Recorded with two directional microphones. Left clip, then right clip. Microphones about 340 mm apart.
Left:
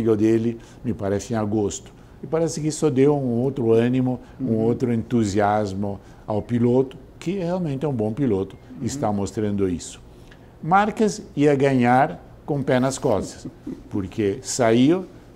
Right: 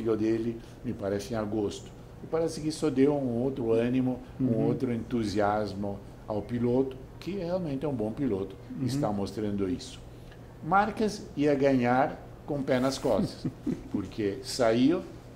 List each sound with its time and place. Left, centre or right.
0.0 s speech: left